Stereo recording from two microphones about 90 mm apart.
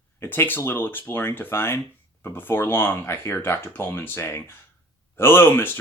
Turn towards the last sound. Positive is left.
turn(degrees=25)  # may be behind; listen again after turning